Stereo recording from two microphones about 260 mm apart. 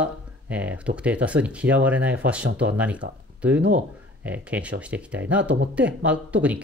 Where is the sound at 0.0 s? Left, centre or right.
Centre.